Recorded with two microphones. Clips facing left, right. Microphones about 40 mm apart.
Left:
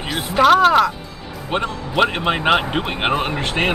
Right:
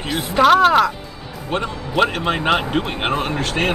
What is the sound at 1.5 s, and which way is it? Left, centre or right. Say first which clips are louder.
Speech: left 1 dB; centre.